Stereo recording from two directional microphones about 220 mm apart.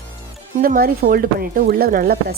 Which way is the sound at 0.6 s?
40° right (ahead or behind).